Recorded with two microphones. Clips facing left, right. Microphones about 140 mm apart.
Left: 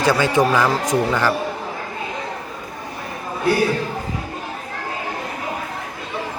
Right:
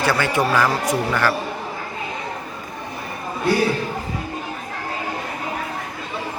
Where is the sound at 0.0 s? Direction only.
15° left (ahead or behind).